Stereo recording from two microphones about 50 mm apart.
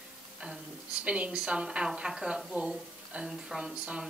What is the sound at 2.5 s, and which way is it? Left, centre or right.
Speech, right.